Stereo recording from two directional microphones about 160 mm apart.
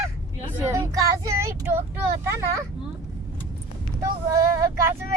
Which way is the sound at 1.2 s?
15° right (ahead or behind).